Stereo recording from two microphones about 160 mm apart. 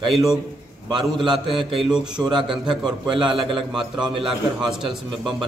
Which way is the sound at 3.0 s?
30° right (ahead or behind).